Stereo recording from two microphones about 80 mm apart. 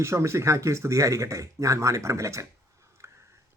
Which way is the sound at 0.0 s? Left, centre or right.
Right.